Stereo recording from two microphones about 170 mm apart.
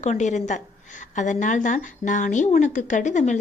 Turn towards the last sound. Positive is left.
turn(degrees=45)  # may be behind; listen again after turning